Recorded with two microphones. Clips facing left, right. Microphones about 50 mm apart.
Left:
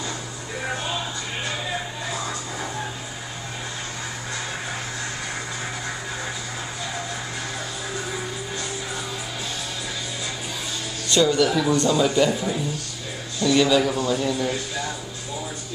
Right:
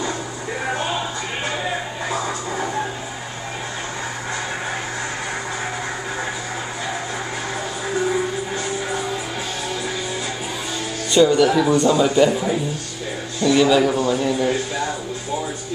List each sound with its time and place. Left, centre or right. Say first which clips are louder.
11.1 s a man's voice: right 5 dB; centre